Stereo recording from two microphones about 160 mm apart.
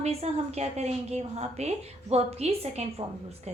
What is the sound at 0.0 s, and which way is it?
A woman's voice, 40° right (ahead or behind).